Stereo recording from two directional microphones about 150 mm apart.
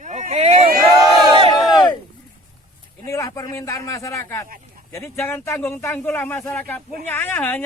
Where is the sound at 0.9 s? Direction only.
25° right (ahead or behind).